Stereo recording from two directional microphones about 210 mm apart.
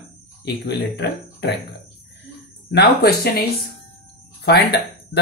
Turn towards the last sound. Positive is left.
turn(degrees=50)  # may be behind; listen again after turning